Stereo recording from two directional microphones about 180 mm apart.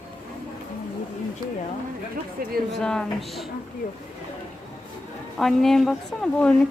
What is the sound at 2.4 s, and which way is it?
Speech, 55° right (ahead or behind).